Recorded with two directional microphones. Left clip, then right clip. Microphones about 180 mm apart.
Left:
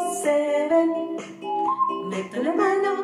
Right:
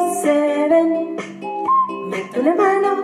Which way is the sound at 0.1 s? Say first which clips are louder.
Right 5 dB; 35° right (ahead or behind).